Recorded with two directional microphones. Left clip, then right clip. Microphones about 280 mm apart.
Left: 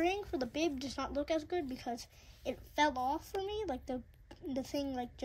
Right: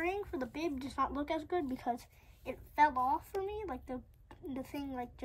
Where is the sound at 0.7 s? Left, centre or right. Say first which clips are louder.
Right 2 dB; centre.